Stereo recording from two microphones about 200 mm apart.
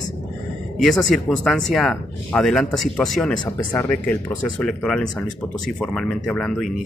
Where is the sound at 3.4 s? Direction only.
20° left (ahead or behind).